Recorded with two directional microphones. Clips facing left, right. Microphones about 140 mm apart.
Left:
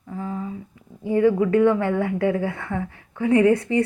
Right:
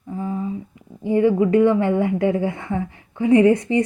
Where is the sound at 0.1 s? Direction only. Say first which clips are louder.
Right 4 dB; 20° right (ahead or behind).